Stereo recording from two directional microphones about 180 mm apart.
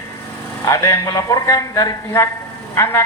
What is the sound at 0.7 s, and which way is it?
Speech, 15° left (ahead or behind).